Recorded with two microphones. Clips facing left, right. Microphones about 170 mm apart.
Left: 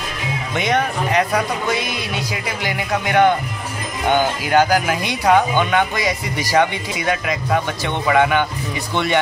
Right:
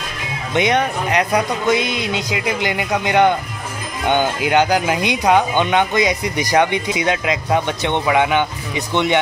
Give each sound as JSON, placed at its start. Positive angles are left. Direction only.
{"t": 0.6, "sound": "speech", "side_deg": -20}